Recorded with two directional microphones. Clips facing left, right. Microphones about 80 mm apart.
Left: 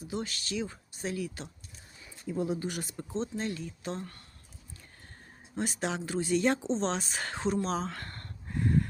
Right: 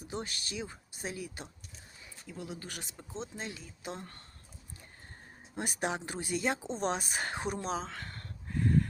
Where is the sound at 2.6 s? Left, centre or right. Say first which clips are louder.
Left 9 dB; centre.